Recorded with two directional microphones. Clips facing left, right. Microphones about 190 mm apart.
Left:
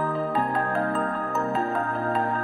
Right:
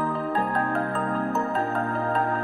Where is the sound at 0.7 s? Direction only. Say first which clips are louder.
Even; centre (ahead or behind).